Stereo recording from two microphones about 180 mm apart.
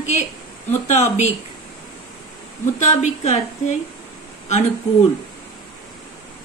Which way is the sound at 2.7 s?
40° left (ahead or behind).